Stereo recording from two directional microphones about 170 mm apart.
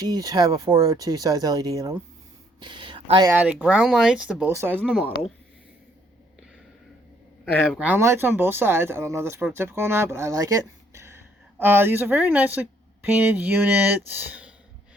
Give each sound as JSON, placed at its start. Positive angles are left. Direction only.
{"t": 0.0, "sound": "speech", "side_deg": -20}
{"t": 2.6, "sound": "a sound", "side_deg": -30}
{"t": 3.2, "sound": "speech", "side_deg": -10}
{"t": 7.6, "sound": "speech", "side_deg": 0}
{"t": 7.9, "sound": "speech", "side_deg": -15}